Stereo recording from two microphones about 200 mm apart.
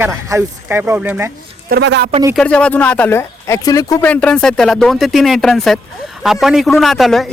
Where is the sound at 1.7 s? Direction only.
60° right (ahead or behind).